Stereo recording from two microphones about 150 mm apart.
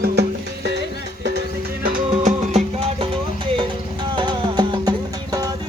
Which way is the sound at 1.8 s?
70° right (ahead or behind).